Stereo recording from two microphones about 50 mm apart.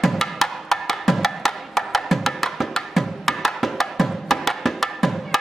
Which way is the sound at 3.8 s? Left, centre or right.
Centre.